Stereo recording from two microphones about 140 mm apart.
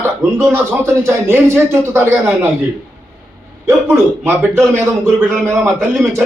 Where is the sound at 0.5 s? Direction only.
15° right (ahead or behind).